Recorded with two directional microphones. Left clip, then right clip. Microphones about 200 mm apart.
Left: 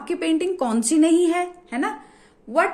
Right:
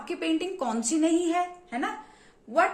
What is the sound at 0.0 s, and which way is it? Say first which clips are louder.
A woman's voice: left 6 dB; 40° left (ahead or behind).